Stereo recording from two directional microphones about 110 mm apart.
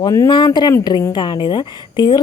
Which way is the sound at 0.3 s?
45° left (ahead or behind).